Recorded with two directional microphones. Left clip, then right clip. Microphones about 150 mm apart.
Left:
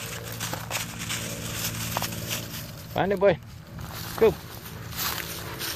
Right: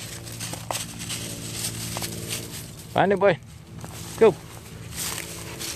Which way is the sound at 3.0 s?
65° right (ahead or behind).